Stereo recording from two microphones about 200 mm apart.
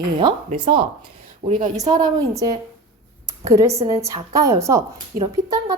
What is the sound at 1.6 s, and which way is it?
Speech, 35° right (ahead or behind).